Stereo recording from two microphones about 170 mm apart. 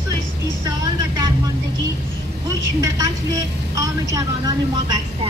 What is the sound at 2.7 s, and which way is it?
A woman's voice, 20° right (ahead or behind).